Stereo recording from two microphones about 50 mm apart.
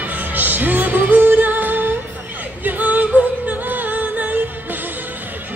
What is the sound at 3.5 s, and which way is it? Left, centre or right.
Music, right.